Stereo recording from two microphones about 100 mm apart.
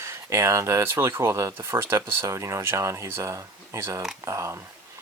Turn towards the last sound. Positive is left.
turn(degrees=-30)  # may be behind; listen again after turning